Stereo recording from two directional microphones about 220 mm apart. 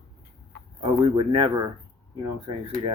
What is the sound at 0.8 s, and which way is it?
Speech, 25° right (ahead or behind).